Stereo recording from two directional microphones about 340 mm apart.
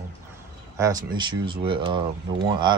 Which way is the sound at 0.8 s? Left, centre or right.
Centre.